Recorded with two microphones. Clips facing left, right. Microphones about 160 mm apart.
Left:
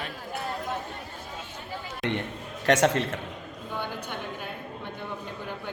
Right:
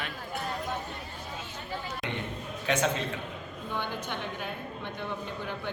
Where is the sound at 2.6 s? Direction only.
75° left (ahead or behind).